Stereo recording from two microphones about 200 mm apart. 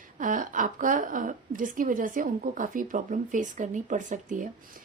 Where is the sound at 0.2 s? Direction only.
40° right (ahead or behind).